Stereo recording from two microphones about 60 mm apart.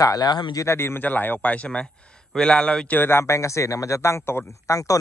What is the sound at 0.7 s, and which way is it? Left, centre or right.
Speech, left.